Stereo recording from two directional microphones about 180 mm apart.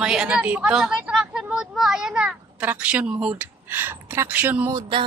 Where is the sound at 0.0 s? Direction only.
5° right (ahead or behind).